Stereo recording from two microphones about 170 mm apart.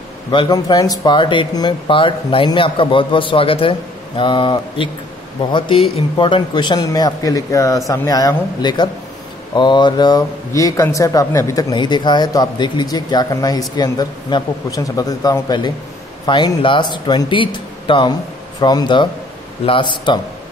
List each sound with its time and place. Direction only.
0.3 s speech: 25° left (ahead or behind)